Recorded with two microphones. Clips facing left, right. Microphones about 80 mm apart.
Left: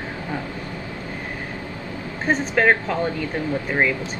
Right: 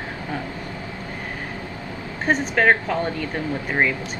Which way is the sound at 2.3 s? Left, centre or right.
Centre.